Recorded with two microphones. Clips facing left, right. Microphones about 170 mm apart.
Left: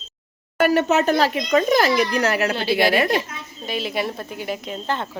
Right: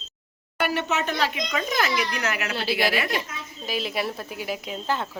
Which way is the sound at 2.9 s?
40° left (ahead or behind).